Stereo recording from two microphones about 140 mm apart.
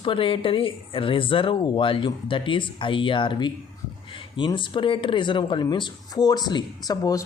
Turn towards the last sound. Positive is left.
turn(degrees=25)  # may be behind; listen again after turning